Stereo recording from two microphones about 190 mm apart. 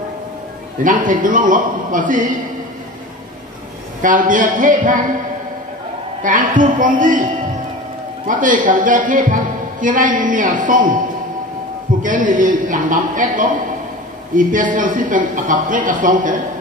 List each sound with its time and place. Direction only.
0.8 s a woman's voice: 45° right (ahead or behind)
4.0 s a woman's voice: 45° right (ahead or behind)
6.2 s a woman's voice: 45° right (ahead or behind)
8.3 s a woman's voice: 45° right (ahead or behind)
12.0 s a woman's voice: 45° right (ahead or behind)